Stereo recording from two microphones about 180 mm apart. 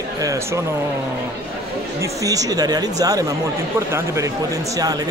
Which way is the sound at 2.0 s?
20° right (ahead or behind).